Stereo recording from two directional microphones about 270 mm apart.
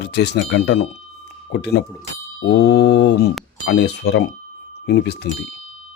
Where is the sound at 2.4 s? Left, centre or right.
Left.